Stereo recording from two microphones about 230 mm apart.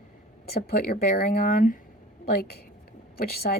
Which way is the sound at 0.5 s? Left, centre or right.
Left.